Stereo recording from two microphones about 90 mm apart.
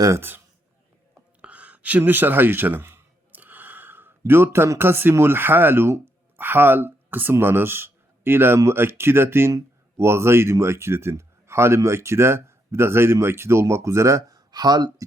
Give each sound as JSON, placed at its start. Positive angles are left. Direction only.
{"t": 0.2, "sound": "a man's voice", "side_deg": -25}
{"t": 1.4, "sound": "a sound", "side_deg": -15}
{"t": 4.2, "sound": "speech", "side_deg": -25}